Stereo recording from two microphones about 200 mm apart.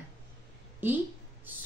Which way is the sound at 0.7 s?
10° right (ahead or behind).